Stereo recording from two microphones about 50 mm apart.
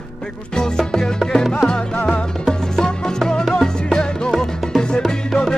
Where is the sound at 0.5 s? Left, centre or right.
Centre.